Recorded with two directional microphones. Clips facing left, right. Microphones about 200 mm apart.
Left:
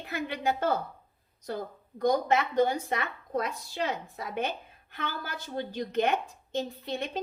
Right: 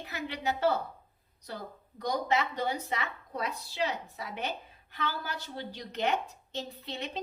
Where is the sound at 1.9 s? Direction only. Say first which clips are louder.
Left 5 dB; 50° left (ahead or behind).